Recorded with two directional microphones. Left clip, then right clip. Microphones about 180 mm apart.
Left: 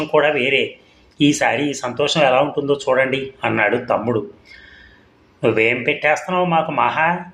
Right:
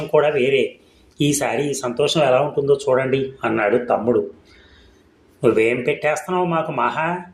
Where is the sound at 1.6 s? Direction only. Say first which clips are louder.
Even; 45° right (ahead or behind); by 4.1 s 20° right (ahead or behind).